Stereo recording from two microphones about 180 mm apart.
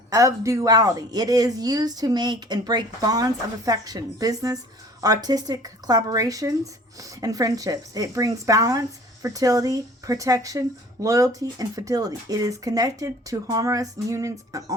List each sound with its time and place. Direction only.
0.1 s speech: 15° right (ahead or behind)